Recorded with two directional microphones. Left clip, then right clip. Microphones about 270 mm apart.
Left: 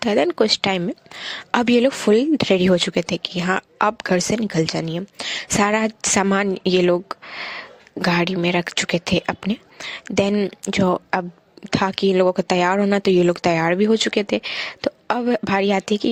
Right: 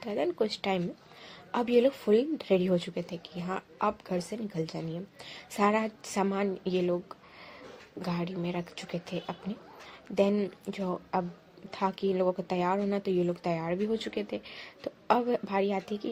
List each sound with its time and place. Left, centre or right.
0.0 s speech: left